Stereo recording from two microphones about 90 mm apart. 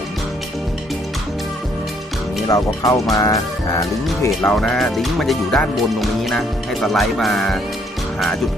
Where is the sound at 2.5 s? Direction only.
40° left (ahead or behind).